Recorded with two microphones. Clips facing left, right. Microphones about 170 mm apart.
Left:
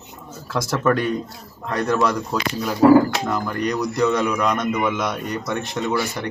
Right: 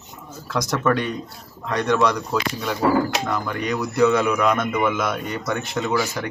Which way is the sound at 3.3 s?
Centre (ahead or behind).